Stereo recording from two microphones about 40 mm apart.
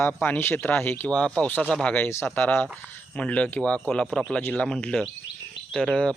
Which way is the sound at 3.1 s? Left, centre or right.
Left.